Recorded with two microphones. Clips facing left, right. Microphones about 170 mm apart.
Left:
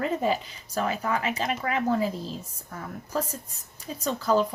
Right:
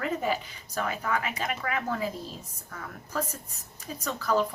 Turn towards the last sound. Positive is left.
turn(degrees=25)  # may be behind; listen again after turning